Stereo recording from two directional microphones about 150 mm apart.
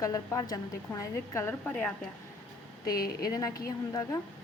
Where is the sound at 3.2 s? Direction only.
25° left (ahead or behind).